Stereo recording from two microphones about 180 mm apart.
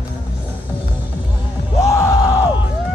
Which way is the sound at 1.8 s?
15° left (ahead or behind).